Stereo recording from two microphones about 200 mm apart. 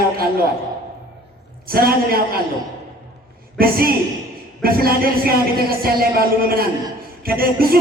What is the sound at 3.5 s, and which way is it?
A man's voice, 50° right (ahead or behind).